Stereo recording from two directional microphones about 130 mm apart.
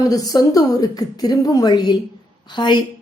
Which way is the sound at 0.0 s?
25° left (ahead or behind).